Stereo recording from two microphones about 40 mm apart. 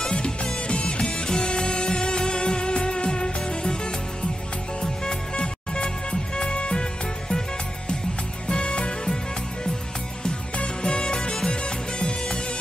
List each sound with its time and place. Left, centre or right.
0.1 s music: left
5.0 s music: left
8.5 s music: left
10.5 s music: left